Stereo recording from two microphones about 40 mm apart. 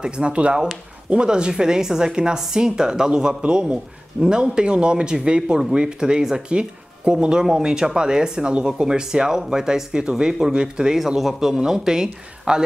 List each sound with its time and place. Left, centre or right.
0.0 s speech: right
11.1 s speech: centre